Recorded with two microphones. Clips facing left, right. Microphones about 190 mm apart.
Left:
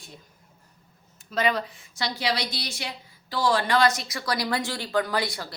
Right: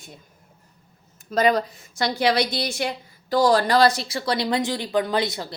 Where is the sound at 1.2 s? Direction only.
40° right (ahead or behind).